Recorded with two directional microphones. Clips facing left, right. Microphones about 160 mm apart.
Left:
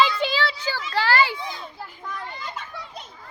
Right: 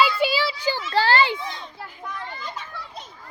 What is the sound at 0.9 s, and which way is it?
Children playing, 30° right (ahead or behind).